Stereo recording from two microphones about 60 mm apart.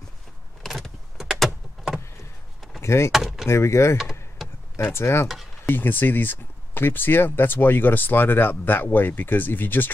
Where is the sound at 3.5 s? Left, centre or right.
Left.